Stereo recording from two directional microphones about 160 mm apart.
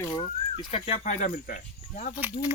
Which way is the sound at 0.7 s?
40° left (ahead or behind).